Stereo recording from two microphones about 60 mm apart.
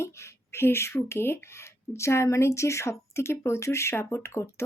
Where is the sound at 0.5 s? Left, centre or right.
Left.